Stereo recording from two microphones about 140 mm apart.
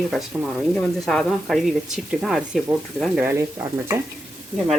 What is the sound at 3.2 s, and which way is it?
Frying, 20° right (ahead or behind).